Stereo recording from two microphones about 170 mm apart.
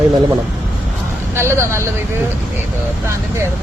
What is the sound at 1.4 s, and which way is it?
Speech, 15° right (ahead or behind).